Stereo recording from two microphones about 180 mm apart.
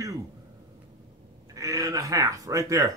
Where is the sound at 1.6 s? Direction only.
20° right (ahead or behind).